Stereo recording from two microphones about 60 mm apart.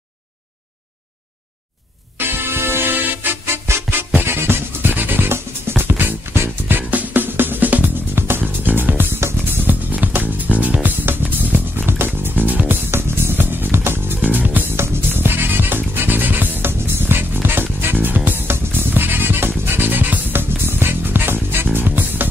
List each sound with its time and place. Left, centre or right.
2.1 s music: right
6.9 s music: right
9.2 s music: right
9.7 s music: right
14.2 s music: right